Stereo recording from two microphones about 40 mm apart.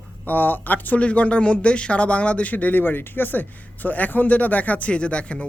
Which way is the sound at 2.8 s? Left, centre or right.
Left.